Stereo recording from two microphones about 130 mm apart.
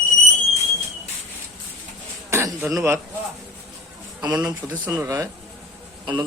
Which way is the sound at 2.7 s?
20° right (ahead or behind).